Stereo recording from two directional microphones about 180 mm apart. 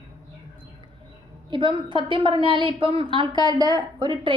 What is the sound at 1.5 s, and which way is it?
A woman's voice, 25° right (ahead or behind).